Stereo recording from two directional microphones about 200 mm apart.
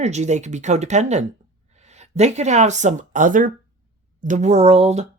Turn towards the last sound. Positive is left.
turn(degrees=-30)  # may be behind; listen again after turning